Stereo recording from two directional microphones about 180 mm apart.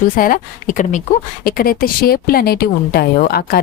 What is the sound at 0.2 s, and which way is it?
A woman's voice, 50° left (ahead or behind).